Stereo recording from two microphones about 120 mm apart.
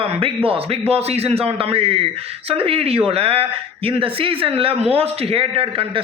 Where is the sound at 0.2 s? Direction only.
50° right (ahead or behind).